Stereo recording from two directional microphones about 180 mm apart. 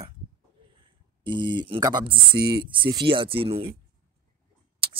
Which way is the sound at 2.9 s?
25° right (ahead or behind).